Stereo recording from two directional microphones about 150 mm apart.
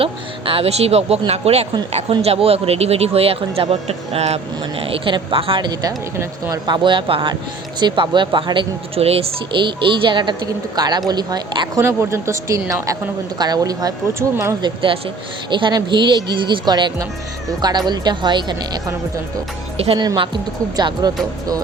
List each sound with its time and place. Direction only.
0.0 s speech: 40° right (ahead or behind)
6.1 s speech: 15° right (ahead or behind)
6.7 s speech: 35° right (ahead or behind)
11.8 s speech: 20° right (ahead or behind)
14.6 s speech: 35° right (ahead or behind)
19.7 s speech: 40° right (ahead or behind)
20.0 s speech: 30° right (ahead or behind)